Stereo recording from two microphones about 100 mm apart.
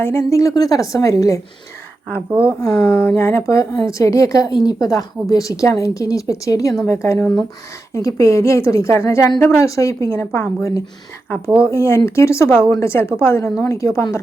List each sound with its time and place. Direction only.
0.0 s speech: 25° left (ahead or behind)
2.3 s a woman's voice: 15° right (ahead or behind)
2.6 s a woman's voice: 25° left (ahead or behind)